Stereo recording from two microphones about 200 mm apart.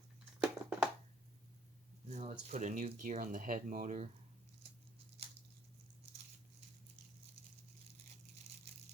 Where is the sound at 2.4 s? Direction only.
35° right (ahead or behind).